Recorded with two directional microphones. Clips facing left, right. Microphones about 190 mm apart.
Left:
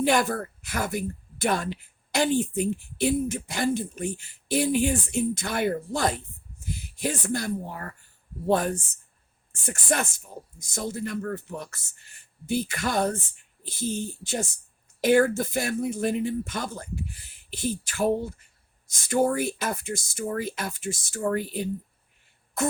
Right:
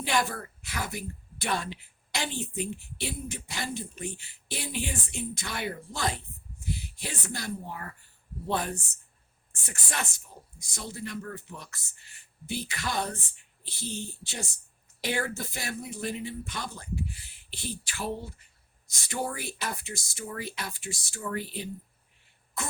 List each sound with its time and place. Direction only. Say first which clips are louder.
0.0 s a woman's voice: left 6 dB; 50° left (ahead or behind)